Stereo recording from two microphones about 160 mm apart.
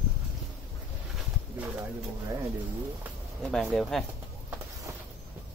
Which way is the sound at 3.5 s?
Centre (ahead or behind).